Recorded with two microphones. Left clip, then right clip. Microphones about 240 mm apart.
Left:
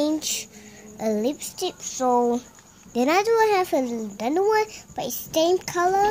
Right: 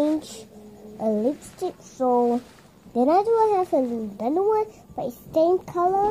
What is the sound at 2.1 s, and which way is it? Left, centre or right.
Speech, centre.